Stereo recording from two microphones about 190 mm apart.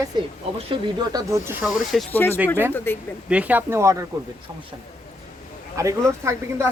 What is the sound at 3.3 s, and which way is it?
Speech, 5° right (ahead or behind).